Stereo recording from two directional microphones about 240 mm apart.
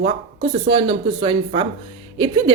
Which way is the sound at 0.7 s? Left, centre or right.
Right.